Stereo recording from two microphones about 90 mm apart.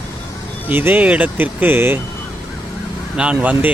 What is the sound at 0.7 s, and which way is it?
Speech, 20° right (ahead or behind).